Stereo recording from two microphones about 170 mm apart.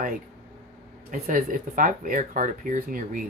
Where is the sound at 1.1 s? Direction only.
50° right (ahead or behind).